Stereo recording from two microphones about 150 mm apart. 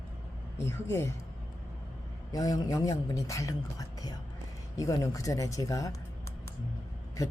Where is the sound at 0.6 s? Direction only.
15° left (ahead or behind).